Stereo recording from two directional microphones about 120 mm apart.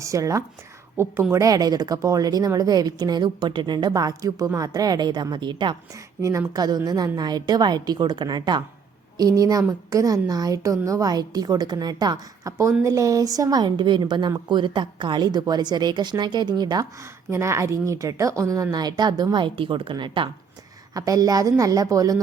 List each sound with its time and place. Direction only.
0.0 s a woman's voice: 25° right (ahead or behind)
17.3 s speech: 25° right (ahead or behind); by 20.3 s 40° right (ahead or behind)
20.9 s a woman's voice: 30° right (ahead or behind)